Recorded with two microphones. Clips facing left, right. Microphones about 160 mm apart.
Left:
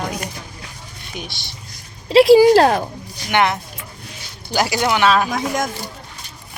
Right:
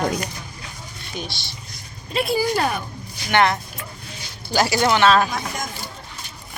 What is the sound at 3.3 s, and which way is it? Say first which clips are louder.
Speech: left 1 dB; 15° left (ahead or behind).